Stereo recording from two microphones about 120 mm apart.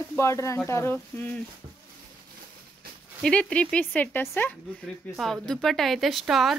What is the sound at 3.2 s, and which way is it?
Speech, 10° left (ahead or behind).